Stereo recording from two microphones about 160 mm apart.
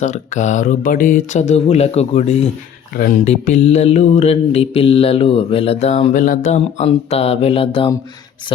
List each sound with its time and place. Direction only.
0.0 s speech: 50° left (ahead or behind)
3.2 s mantra: 45° left (ahead or behind)